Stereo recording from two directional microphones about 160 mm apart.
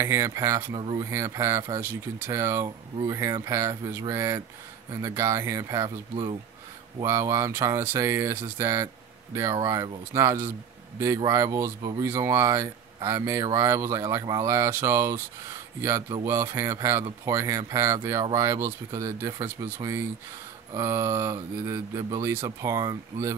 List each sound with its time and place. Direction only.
0.0 s speech: 20° right (ahead or behind)
0.7 s speech: 30° right (ahead or behind)
1.1 s speech: 20° right (ahead or behind)
7.0 s speech: 20° right (ahead or behind)